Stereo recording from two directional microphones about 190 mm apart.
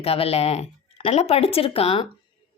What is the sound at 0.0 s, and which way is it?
A woman's voice, 30° left (ahead or behind).